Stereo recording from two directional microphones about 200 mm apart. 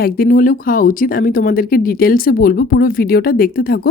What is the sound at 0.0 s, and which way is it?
Speech, 45° left (ahead or behind).